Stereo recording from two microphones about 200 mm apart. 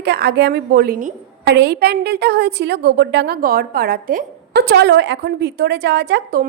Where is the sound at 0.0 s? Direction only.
50° right (ahead or behind).